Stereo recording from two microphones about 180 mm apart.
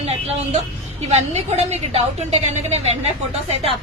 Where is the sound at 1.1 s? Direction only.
35° right (ahead or behind).